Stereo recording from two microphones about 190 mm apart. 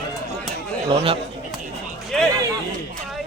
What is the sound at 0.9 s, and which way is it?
Speech, 30° right (ahead or behind).